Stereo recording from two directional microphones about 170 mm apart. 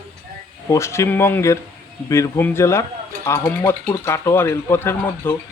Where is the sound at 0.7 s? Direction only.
15° left (ahead or behind).